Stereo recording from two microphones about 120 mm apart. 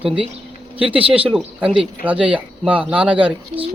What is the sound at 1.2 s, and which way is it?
Speech, 5° right (ahead or behind).